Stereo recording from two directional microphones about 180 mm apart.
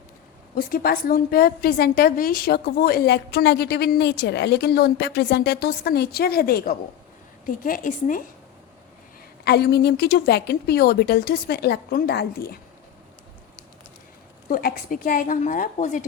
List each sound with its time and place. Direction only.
0.5 s a woman's voice: 55° left (ahead or behind)
7.4 s a woman's voice: 50° left (ahead or behind)
9.4 s a woman's voice: 65° left (ahead or behind)
14.5 s a woman's voice: 50° left (ahead or behind)